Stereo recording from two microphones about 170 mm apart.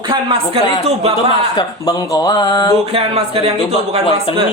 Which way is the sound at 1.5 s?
20° left (ahead or behind).